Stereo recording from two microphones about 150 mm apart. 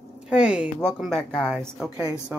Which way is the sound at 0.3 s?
5° right (ahead or behind).